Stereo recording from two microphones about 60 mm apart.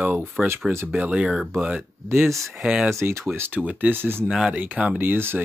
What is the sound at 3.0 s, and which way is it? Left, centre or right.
Speech, right.